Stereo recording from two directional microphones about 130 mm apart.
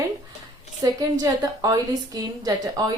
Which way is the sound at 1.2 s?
30° right (ahead or behind).